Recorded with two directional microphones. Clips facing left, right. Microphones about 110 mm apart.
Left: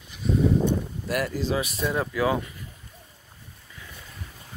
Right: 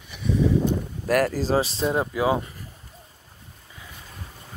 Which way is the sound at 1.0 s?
45° right (ahead or behind).